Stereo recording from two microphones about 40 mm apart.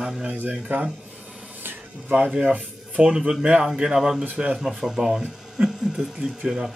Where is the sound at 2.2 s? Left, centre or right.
Right.